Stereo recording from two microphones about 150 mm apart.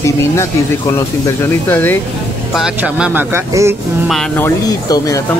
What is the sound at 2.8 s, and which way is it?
Speech, 10° right (ahead or behind).